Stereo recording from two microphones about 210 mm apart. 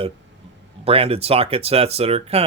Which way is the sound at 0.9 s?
25° right (ahead or behind).